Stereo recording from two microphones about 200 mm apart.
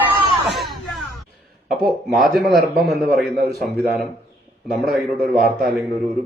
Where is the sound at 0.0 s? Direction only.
Centre (ahead or behind).